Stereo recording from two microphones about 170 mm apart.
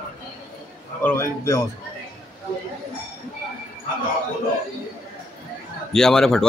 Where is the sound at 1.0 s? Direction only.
15° left (ahead or behind).